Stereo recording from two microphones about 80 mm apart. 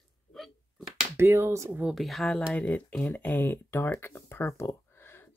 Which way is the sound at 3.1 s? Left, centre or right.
Left.